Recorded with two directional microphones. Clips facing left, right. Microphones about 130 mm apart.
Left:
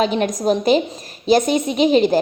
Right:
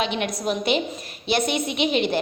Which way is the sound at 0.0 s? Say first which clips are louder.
Left 7 dB; 40° left (ahead or behind).